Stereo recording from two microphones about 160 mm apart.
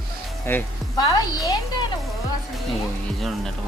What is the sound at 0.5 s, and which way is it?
Speech, 15° left (ahead or behind).